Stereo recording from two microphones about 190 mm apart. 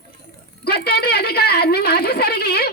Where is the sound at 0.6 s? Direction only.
55° left (ahead or behind).